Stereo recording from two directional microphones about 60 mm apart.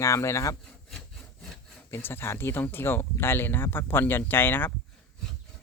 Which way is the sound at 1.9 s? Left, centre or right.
Left.